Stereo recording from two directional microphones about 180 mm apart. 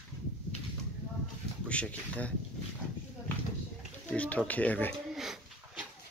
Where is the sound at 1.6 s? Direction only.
5° left (ahead or behind).